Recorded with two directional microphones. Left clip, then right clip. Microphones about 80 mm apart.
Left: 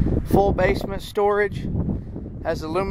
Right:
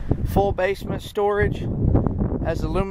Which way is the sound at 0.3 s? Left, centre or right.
Centre.